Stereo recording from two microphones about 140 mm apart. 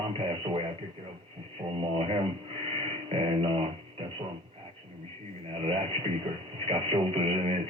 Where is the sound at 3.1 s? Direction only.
40° right (ahead or behind).